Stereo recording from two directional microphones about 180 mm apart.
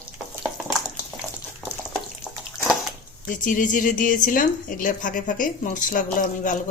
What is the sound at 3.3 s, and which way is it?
A woman's voice, 50° left (ahead or behind).